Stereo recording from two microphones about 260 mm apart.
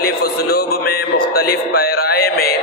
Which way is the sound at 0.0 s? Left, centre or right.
Left.